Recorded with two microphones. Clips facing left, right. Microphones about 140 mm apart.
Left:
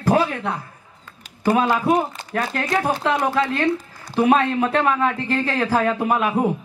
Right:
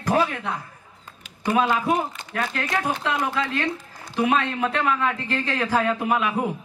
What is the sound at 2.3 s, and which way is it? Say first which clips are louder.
A man's voice: left 4 dB; 40° left (ahead or behind).